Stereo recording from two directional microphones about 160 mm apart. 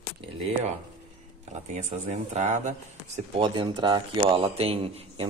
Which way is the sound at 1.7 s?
45° right (ahead or behind).